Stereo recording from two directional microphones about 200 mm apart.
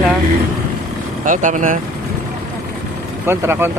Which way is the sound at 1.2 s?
40° right (ahead or behind).